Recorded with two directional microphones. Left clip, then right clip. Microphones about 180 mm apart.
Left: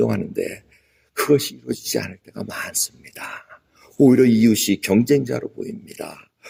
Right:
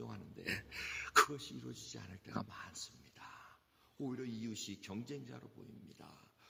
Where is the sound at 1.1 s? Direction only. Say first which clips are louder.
Left 13 dB; 25° left (ahead or behind).